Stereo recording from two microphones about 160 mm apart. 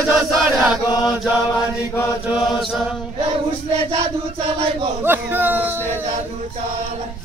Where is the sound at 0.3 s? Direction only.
Centre (ahead or behind).